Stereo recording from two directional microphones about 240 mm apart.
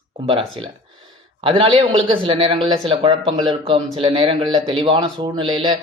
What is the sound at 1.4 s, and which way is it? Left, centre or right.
A man's voice, right.